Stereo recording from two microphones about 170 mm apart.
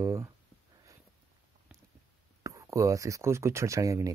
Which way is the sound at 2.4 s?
20° right (ahead or behind).